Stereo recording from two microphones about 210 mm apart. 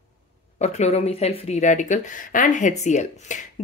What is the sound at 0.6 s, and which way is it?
Speech, 30° left (ahead or behind).